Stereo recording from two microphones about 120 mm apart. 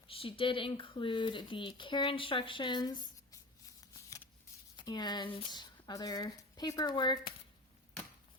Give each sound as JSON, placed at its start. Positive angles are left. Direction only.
{"t": 0.1, "sound": "speech", "side_deg": 50}
{"t": 4.8, "sound": "speech", "side_deg": 35}